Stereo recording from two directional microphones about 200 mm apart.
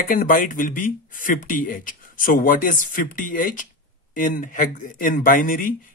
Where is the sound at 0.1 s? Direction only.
45° left (ahead or behind).